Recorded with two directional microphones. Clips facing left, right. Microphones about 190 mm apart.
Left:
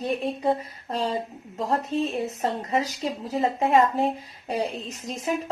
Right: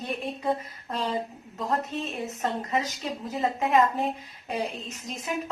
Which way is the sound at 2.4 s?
35° left (ahead or behind).